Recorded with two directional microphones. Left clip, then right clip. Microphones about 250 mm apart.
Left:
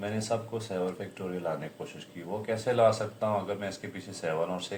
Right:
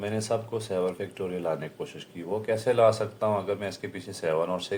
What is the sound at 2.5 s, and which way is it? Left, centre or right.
Speech, right.